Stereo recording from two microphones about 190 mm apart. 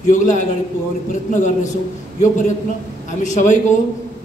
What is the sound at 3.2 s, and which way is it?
Speech, 40° left (ahead or behind).